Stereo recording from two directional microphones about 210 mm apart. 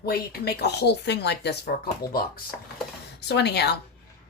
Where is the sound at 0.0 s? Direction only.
50° left (ahead or behind).